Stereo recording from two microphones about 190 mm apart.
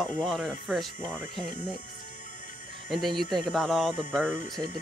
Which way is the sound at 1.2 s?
45° left (ahead or behind).